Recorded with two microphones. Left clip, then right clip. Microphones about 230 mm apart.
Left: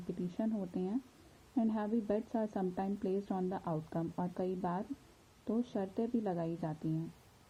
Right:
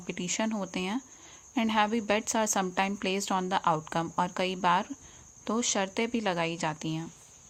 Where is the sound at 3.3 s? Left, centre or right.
Right.